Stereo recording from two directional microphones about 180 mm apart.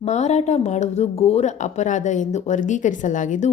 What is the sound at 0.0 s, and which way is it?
A woman's voice, 40° left (ahead or behind).